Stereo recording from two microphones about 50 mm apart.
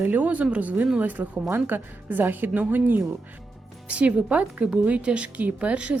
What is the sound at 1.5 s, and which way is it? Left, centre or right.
Speech, right.